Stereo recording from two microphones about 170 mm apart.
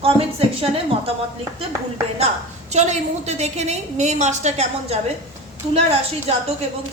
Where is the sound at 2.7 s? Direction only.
40° right (ahead or behind).